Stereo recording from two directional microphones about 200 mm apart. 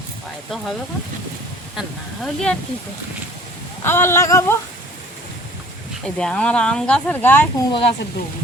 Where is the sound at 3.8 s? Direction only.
10° left (ahead or behind).